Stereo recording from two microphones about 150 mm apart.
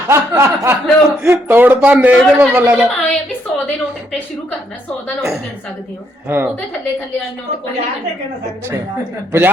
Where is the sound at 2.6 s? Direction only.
10° right (ahead or behind).